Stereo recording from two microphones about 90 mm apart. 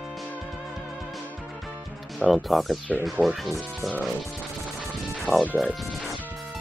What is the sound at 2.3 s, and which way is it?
Speech, centre (ahead or behind).